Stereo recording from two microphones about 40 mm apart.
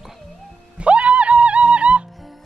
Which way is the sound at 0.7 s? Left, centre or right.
Right.